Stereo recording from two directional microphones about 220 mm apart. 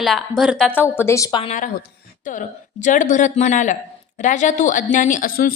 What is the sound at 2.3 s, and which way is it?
A woman's voice, 35° left (ahead or behind).